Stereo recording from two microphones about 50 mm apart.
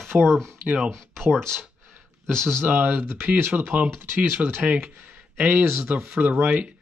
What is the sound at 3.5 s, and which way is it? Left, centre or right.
Speech, right.